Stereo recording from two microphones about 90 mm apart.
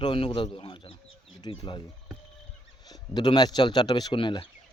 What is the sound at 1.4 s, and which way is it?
Speech, 60° left (ahead or behind).